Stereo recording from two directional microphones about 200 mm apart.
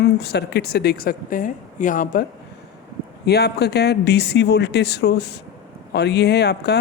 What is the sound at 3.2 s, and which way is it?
Speech, 55° left (ahead or behind).